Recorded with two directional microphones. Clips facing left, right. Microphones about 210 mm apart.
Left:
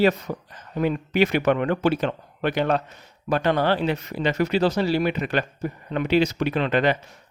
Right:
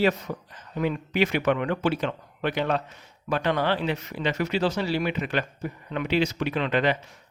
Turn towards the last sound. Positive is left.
turn(degrees=45)  # may be behind; listen again after turning